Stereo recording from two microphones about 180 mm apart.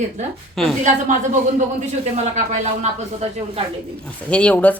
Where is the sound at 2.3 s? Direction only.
40° right (ahead or behind).